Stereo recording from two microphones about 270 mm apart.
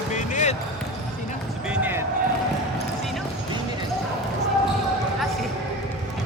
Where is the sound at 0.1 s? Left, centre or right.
Left.